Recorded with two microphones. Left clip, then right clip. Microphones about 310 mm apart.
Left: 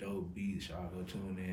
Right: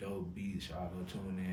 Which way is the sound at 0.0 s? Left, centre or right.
Centre.